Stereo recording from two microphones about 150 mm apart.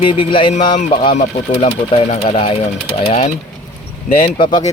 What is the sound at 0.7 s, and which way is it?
Speech, 60° left (ahead or behind).